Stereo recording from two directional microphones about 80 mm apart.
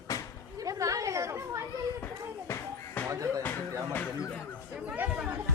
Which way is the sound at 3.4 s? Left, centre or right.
Left.